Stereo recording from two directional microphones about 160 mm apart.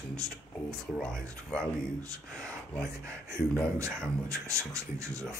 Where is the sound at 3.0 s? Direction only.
15° right (ahead or behind).